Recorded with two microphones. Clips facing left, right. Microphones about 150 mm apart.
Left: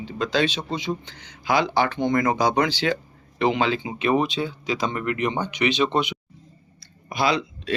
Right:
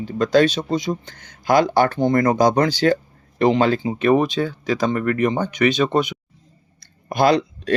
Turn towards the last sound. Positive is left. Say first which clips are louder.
# right 6 dB
turn(degrees=-50)  # may be behind; listen again after turning